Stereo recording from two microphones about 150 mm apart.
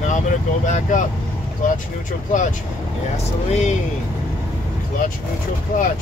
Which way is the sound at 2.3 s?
60° left (ahead or behind).